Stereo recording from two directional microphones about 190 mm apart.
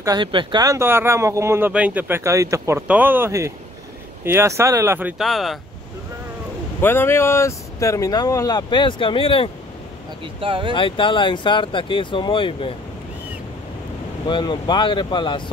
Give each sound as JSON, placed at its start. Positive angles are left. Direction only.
{"t": 0.0, "sound": "speech", "side_deg": -25}
{"t": 6.8, "sound": "speech", "side_deg": 10}
{"t": 10.2, "sound": "speech", "side_deg": -25}
{"t": 10.7, "sound": "speech", "side_deg": 25}
{"t": 14.2, "sound": "speech", "side_deg": 25}